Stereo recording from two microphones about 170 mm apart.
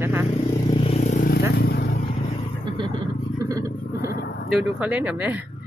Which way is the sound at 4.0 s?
80° left.